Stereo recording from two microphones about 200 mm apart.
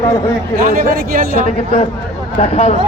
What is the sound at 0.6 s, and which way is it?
Speech, 45° right (ahead or behind).